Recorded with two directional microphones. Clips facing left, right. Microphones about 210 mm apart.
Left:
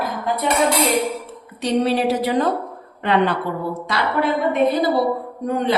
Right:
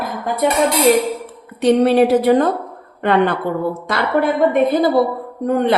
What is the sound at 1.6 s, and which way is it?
A woman's voice, 55° right (ahead or behind).